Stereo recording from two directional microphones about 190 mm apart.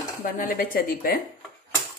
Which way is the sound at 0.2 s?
45° left (ahead or behind).